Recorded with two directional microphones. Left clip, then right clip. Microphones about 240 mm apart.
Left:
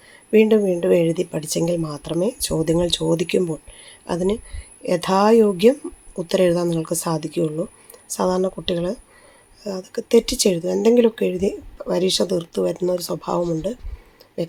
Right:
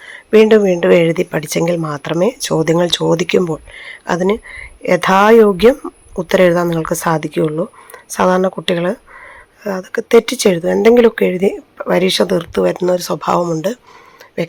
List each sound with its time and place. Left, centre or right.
0.0 s speech: centre